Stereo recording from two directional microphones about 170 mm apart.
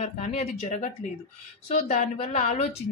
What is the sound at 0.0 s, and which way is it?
A woman's voice, 40° left (ahead or behind).